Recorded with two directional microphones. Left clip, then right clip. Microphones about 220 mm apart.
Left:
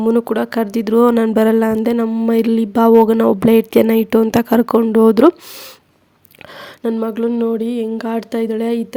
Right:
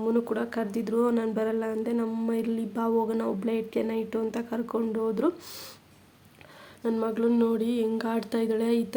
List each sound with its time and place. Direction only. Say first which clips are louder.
0.0 s speech: left 12 dB; 45° left (ahead or behind)
6.8 s speech: left 8 dB; 35° left (ahead or behind)